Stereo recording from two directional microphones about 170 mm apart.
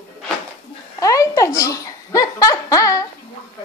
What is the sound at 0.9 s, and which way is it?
Giggle, 20° left (ahead or behind).